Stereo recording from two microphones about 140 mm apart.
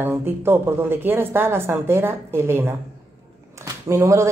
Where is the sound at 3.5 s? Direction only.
20° right (ahead or behind).